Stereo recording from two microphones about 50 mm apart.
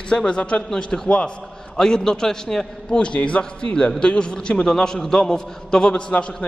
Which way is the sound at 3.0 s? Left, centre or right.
Left.